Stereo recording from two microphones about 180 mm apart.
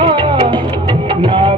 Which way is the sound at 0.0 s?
30° right (ahead or behind).